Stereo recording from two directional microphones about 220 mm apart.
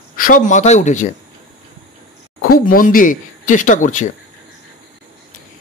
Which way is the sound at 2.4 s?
40° left (ahead or behind).